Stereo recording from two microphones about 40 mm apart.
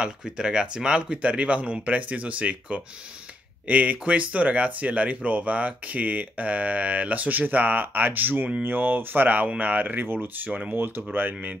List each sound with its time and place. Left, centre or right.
0.2 s speech: centre
1.2 s speech: right